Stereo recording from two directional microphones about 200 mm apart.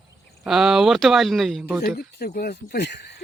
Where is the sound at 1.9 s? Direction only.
50° left (ahead or behind).